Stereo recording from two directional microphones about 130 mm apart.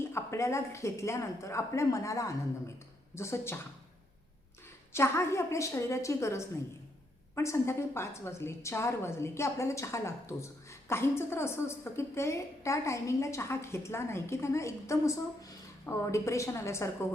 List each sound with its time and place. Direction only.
0.1 s a woman's voice: 20° left (ahead or behind)
4.9 s a woman's voice: 20° left (ahead or behind)